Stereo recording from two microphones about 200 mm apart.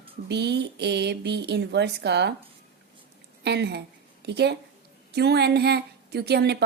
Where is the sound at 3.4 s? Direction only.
55° right (ahead or behind).